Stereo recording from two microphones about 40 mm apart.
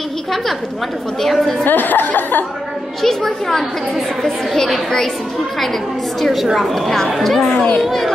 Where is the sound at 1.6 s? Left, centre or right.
Left.